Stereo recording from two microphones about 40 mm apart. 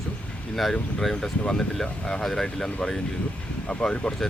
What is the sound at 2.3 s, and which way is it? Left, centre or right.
Speech, centre.